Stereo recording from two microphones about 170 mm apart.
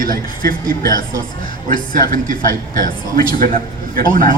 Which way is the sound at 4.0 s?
55° right (ahead or behind).